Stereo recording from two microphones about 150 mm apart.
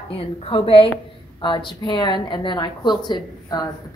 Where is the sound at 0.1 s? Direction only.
35° left (ahead or behind).